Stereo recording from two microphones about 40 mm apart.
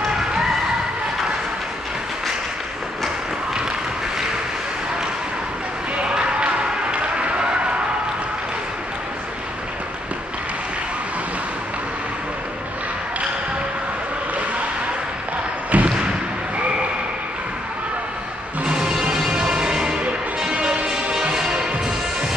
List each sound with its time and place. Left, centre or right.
0.2 s music: centre
6.0 s music: right
15.7 s a sound: right
18.6 s music: centre